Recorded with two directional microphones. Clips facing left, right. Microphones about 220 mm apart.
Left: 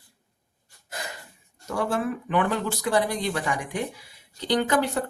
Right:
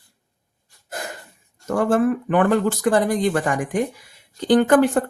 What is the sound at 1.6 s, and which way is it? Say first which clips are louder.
Speech: right 8 dB; 50° right (ahead or behind).